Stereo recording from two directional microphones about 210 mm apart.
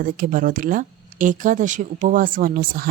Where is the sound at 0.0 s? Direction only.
40° right (ahead or behind).